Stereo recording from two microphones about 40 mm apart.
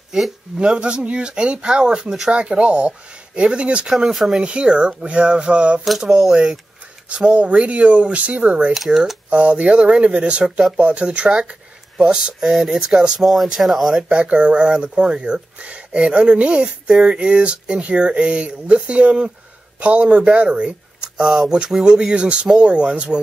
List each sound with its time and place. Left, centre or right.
0.6 s speech: right
2.3 s speech: right
3.9 s speech: centre
4.3 s speech: right
5.9 s speech: centre
6.3 s speech: right
8.7 s speech: centre
9.3 s speech: right
13.2 s speech: centre
14.0 s speech: right
16.9 s speech: centre
21.2 s speech: centre
22.1 s speech: right